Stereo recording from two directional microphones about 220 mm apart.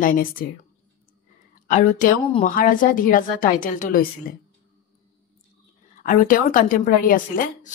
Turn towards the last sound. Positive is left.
turn(degrees=40)  # may be behind; listen again after turning